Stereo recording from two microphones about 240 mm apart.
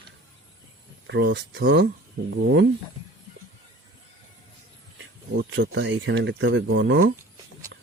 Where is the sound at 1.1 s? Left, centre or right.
Right.